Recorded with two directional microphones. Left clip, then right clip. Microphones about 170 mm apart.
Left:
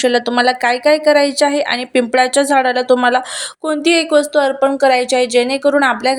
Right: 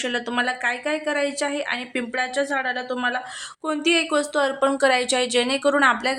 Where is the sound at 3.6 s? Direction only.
30° left (ahead or behind).